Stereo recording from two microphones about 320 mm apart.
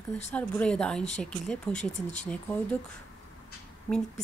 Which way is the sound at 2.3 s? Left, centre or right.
Centre.